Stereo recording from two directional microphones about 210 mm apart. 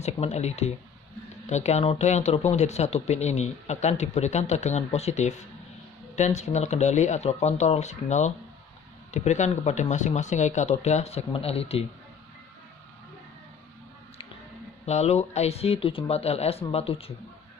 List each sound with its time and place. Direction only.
0.0 s speech: 30° left (ahead or behind)
14.8 s speech: 30° left (ahead or behind)